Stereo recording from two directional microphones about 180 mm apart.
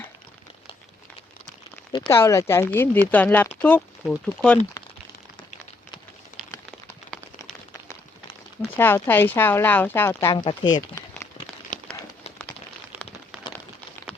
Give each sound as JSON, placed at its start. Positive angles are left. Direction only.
{"t": 1.9, "sound": "speech", "side_deg": 25}
{"t": 4.8, "sound": "a sound", "side_deg": 20}
{"t": 8.7, "sound": "speech", "side_deg": 10}
{"t": 10.3, "sound": "speech", "side_deg": 25}